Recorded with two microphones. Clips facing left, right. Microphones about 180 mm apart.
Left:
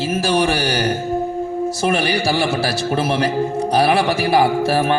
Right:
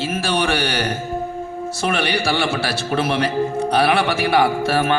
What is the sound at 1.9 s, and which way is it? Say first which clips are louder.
Speech: left 1 dB; 40° left (ahead or behind).